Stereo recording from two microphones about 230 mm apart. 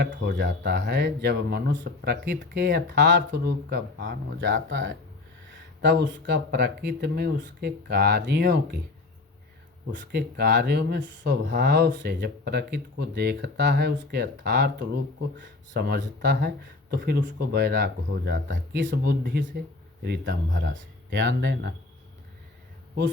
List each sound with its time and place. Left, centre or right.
0.0 s speech: right
9.8 s speech: right